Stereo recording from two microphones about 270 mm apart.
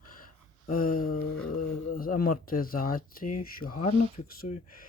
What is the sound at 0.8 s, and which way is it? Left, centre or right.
Speech, left.